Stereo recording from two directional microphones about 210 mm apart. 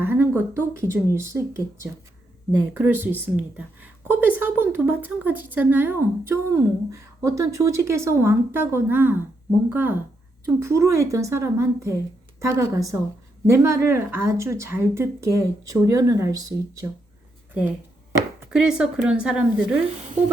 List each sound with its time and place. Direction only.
0.1 s speech: 10° right (ahead or behind)
20.0 s speech: 35° right (ahead or behind)